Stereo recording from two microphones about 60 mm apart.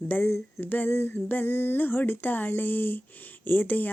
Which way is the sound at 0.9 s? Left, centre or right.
Left.